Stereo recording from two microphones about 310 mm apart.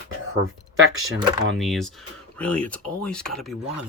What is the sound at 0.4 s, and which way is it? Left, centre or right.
Speech, right.